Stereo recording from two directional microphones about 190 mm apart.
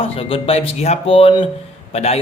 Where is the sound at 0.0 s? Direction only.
30° left (ahead or behind).